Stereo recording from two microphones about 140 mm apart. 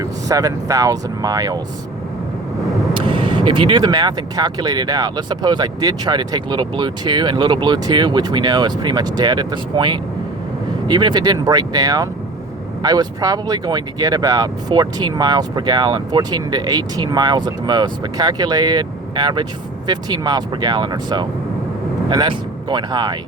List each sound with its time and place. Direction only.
0.0 s speech: 25° right (ahead or behind)
2.9 s speech: 35° right (ahead or behind)